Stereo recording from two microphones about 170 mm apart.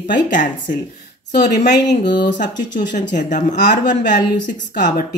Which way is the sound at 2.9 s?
45° left (ahead or behind).